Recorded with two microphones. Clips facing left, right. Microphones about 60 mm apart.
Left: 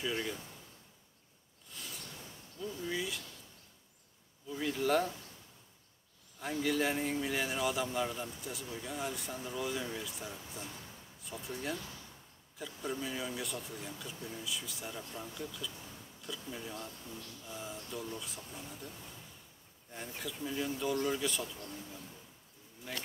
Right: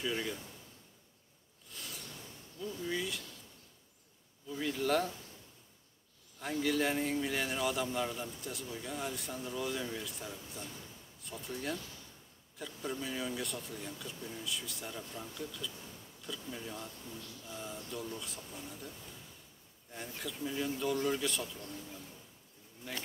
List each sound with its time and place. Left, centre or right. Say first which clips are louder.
0.0 s a man's voice: even; centre
1.7 s a sound: even; centre
2.6 s speech: even; centre
4.5 s a man's voice: left 1 dB; centre
6.4 s a man's voice: even; centre
20.2 s a man's voice: even; centre
22.9 s a man's voice: even; centre